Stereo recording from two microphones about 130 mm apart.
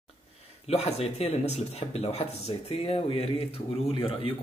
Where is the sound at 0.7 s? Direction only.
55° left (ahead or behind).